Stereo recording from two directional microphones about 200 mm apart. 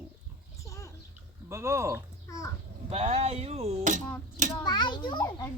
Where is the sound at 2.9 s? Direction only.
30° right (ahead or behind).